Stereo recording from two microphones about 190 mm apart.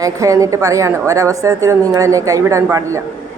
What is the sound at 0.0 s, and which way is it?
A woman's voice, 15° right (ahead or behind).